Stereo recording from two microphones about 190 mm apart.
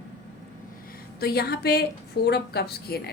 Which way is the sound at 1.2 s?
55° left (ahead or behind).